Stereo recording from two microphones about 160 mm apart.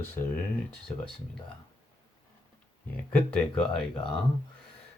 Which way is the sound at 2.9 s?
10° left (ahead or behind).